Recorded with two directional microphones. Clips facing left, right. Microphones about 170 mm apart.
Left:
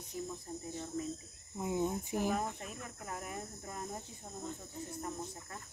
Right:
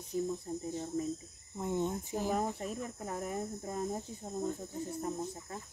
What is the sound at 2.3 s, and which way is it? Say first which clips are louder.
Speech: right 4 dB; 35° right (ahead or behind).